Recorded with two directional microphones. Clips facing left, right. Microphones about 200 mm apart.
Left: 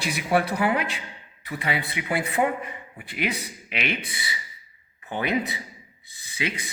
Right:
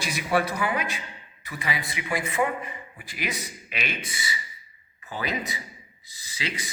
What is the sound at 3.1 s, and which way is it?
Speech, 60° left (ahead or behind).